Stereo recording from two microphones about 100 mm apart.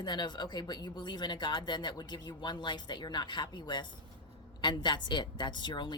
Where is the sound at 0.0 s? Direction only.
45° left (ahead or behind).